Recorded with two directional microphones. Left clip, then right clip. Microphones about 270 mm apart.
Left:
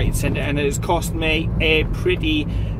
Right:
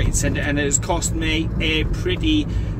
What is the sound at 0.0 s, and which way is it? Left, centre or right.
Speech, centre.